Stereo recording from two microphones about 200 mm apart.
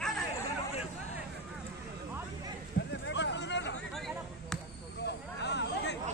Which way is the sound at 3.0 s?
60° left (ahead or behind).